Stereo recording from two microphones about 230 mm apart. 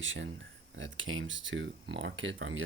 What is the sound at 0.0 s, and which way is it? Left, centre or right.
Speech, right.